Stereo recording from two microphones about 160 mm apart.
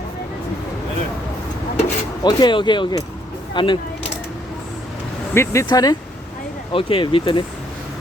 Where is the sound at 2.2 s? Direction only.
30° left (ahead or behind).